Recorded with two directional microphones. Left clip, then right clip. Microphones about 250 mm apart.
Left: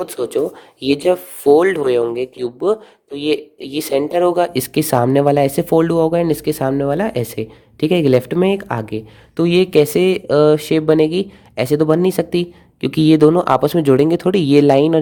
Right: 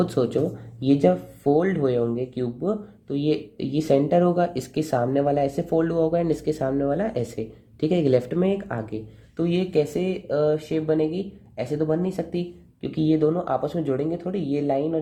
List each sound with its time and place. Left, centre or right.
0.0 s speech: left